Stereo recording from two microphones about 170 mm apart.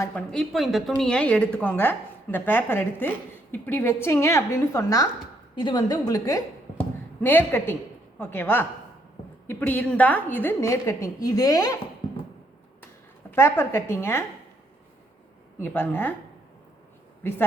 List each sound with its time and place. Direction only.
0.3 s a woman's voice: centre (ahead or behind); by 6.4 s 20° left (ahead or behind)
6.7 s a sound: 10° left (ahead or behind)
8.2 s a woman's voice: 15° left (ahead or behind)
13.3 s a woman's voice: 15° left (ahead or behind)
15.6 s a woman's voice: 10° left (ahead or behind)